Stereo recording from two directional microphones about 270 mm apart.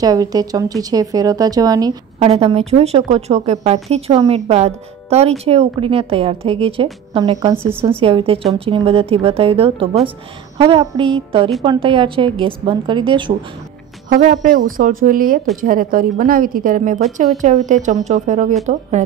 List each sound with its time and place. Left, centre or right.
0.0 s a woman's voice: centre
14.0 s a woman's voice: right